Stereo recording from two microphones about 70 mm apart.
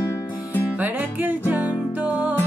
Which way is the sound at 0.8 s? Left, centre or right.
Right.